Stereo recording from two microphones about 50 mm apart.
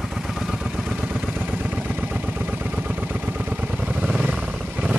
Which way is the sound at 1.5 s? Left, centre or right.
Right.